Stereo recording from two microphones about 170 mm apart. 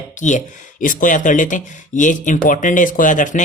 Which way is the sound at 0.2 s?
45° left (ahead or behind).